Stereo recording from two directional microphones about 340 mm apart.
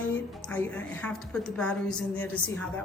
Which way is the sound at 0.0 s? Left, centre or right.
Centre.